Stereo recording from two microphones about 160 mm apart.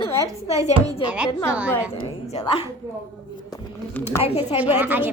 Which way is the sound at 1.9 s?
35° left (ahead or behind).